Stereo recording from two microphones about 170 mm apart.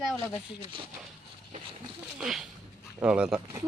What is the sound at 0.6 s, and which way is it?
Speech, 30° right (ahead or behind).